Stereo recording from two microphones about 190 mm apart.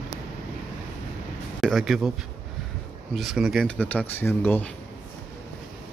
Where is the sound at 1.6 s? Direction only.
Centre (ahead or behind).